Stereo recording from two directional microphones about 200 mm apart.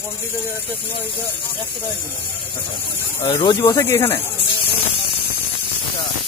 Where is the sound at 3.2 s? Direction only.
25° left (ahead or behind).